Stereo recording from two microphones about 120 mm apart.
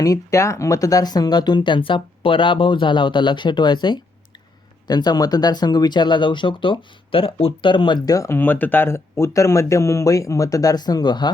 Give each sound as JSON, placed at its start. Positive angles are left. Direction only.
{"t": 0.0, "sound": "speech", "side_deg": 25}